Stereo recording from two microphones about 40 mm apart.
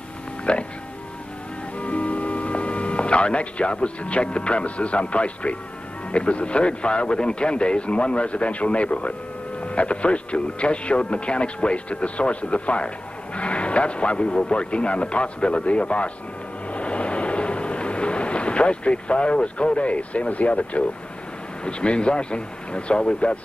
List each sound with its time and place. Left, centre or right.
0.5 s speech: left
1.8 s speech: left
16.7 s vehicle: left
21.6 s speech: left